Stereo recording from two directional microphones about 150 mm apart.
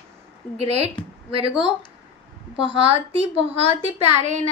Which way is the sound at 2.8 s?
40° right (ahead or behind).